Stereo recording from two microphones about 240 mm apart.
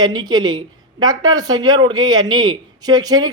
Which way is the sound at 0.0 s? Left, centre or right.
Centre.